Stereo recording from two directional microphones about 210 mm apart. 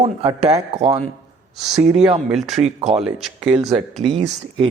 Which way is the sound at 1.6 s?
Centre (ahead or behind).